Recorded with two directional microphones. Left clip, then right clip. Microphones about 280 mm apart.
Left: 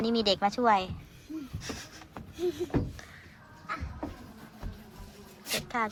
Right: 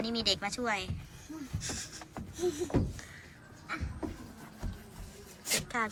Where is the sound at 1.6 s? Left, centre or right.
Centre.